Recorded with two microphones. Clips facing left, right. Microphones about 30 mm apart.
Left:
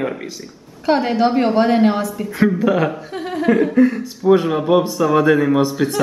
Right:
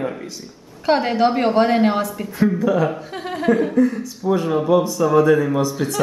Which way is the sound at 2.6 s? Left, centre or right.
Left.